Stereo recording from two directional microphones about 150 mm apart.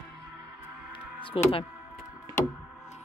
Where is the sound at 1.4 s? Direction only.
35° left (ahead or behind).